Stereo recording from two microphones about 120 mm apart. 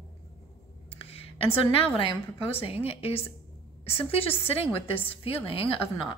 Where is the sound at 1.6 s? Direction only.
50° left (ahead or behind).